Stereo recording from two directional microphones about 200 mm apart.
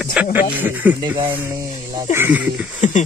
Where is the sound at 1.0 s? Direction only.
25° right (ahead or behind); by 2.7 s 10° right (ahead or behind).